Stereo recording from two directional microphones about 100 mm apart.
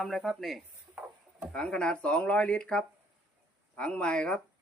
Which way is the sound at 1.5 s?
10° left (ahead or behind).